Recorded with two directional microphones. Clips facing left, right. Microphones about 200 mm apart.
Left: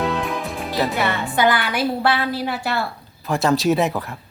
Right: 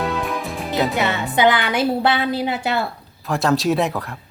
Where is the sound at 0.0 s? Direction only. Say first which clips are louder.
Even; centre (ahead or behind).